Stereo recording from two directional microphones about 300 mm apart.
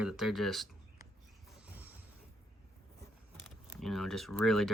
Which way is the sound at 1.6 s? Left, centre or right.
Centre.